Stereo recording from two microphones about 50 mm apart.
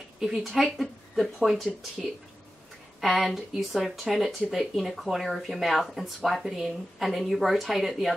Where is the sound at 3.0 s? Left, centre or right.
Centre.